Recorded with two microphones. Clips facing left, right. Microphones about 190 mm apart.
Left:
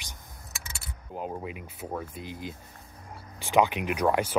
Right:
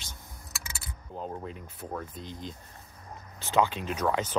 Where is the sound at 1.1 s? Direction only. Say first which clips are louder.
Left 2 dB; 10° left (ahead or behind).